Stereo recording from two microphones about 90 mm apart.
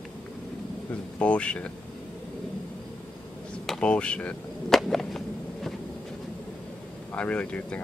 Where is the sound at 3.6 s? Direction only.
10° left (ahead or behind).